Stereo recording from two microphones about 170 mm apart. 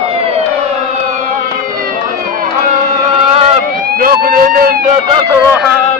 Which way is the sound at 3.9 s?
60° right (ahead or behind).